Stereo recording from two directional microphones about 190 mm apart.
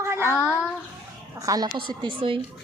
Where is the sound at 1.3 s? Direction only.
20° right (ahead or behind).